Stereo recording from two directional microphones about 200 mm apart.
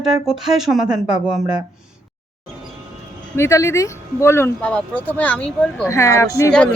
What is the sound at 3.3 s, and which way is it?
Speech, 15° left (ahead or behind).